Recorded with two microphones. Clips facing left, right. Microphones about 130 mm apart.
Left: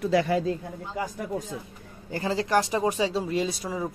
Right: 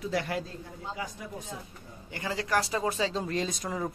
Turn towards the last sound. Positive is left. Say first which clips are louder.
# left 3 dB
turn(degrees=5)  # may be behind; listen again after turning